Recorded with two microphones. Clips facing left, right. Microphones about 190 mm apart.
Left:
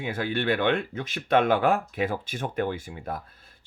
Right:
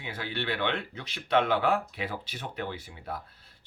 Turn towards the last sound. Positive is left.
turn(degrees=50)  # may be behind; listen again after turning